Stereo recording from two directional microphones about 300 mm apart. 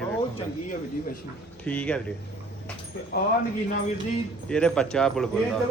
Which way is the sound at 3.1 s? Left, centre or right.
Left.